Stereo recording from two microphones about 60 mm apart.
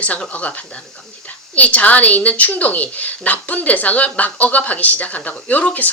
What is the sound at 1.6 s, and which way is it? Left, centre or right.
Speech, left.